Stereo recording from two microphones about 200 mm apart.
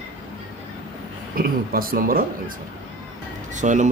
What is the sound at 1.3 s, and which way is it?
Speech, 45° right (ahead or behind).